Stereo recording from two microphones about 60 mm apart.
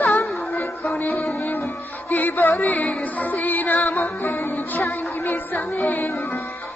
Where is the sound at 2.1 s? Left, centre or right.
Left.